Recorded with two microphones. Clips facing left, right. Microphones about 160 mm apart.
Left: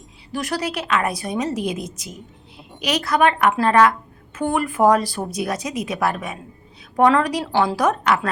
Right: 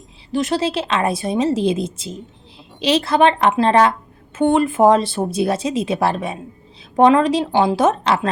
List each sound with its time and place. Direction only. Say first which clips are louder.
0.3 s a woman's voice: right 6 dB; 25° right (ahead or behind)